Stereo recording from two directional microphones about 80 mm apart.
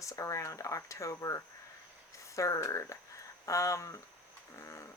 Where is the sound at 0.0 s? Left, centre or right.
Left.